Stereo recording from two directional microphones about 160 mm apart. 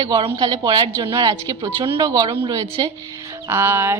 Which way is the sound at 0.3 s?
25° right (ahead or behind).